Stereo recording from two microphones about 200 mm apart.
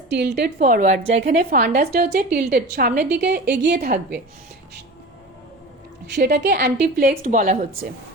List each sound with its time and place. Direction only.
0.1 s a woman's voice: 60° right (ahead or behind)
6.1 s a woman's voice: 55° right (ahead or behind)